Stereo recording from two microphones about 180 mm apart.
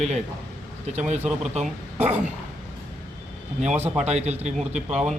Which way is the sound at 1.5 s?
40° right (ahead or behind).